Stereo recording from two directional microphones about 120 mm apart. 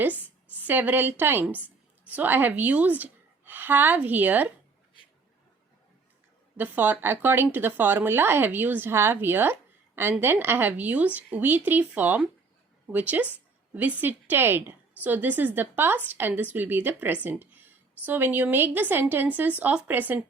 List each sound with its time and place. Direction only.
0.7 s a woman's voice: 15° right (ahead or behind)
6.6 s a woman's voice: 15° right (ahead or behind)